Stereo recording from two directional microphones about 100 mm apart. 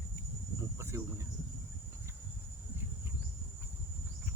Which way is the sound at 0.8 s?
30° right (ahead or behind).